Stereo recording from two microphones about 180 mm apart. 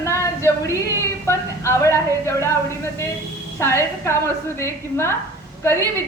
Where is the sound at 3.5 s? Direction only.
15° left (ahead or behind).